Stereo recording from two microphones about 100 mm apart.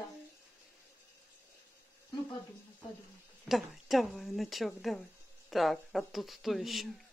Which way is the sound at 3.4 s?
Centre (ahead or behind).